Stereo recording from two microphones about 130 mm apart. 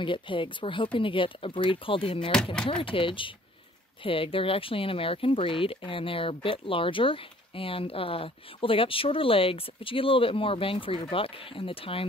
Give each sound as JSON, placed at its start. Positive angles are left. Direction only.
{"t": 0.0, "sound": "speech", "side_deg": 40}